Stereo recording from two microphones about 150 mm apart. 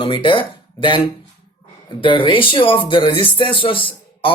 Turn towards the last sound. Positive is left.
turn(degrees=35)  # may be behind; listen again after turning